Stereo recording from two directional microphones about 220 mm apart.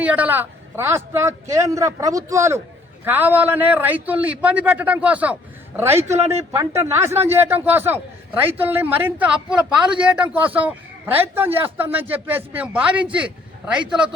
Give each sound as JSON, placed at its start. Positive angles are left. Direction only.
{"t": 0.0, "sound": "a man's voice", "side_deg": -5}